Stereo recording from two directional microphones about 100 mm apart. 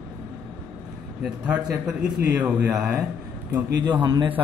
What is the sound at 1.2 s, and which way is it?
A man's voice, 15° right (ahead or behind).